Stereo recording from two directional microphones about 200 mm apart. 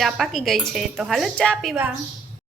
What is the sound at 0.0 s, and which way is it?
A woman's voice, centre (ahead or behind).